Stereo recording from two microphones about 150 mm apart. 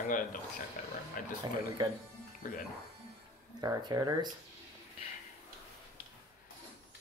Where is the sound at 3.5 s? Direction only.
25° right (ahead or behind).